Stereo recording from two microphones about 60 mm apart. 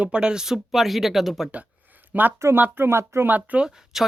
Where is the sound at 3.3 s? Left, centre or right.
Right.